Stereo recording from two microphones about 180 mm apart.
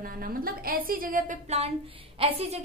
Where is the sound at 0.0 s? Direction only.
55° right (ahead or behind).